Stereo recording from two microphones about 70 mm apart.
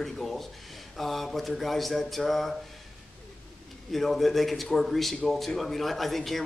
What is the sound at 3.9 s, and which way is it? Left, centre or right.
A man's voice, centre.